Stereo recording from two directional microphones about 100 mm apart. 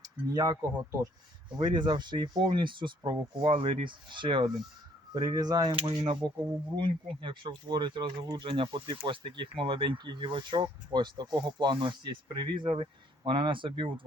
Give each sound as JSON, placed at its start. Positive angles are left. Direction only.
{"t": 0.0, "sound": "speech", "side_deg": -40}
{"t": 1.5, "sound": "speech", "side_deg": -50}
{"t": 5.1, "sound": "speech", "side_deg": -45}
{"t": 6.7, "sound": "speech", "side_deg": -55}